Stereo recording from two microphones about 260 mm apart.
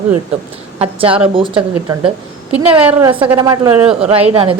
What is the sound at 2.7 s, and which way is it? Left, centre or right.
A woman's voice, centre.